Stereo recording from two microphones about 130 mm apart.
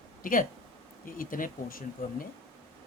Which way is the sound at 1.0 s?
90° left.